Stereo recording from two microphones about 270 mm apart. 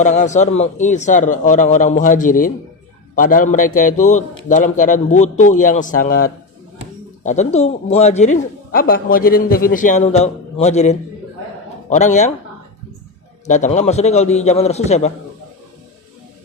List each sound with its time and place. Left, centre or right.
0.0 s a man's voice: left
13.5 s a man's voice: left